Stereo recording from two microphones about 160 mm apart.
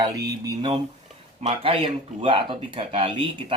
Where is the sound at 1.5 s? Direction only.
35° right (ahead or behind).